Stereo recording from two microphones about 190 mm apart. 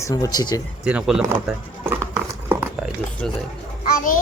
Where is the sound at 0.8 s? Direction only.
5° right (ahead or behind).